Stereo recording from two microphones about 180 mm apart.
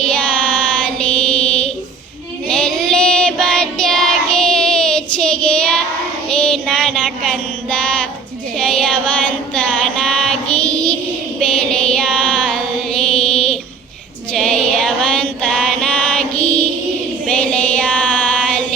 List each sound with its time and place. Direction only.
0.0 s child singing: 5° left (ahead or behind)
8.5 s music: 5° left (ahead or behind)
11.3 s female singing: 5° left (ahead or behind)
14.3 s chant: 5° left (ahead or behind)
17.2 s female singing: 5° left (ahead or behind)